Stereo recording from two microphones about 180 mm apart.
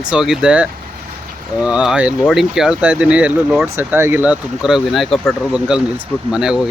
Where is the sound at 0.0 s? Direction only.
5° right (ahead or behind).